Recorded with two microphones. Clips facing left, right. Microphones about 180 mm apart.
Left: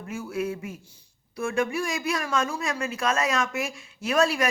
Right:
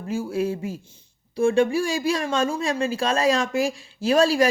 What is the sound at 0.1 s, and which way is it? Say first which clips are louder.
Speech: right 5 dB; 30° right (ahead or behind).